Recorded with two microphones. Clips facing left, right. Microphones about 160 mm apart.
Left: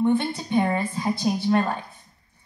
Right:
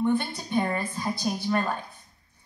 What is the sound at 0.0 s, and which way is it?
A woman's voice, 20° left (ahead or behind).